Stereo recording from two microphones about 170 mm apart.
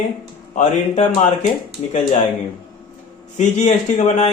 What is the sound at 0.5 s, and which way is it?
Speech, 45° left (ahead or behind).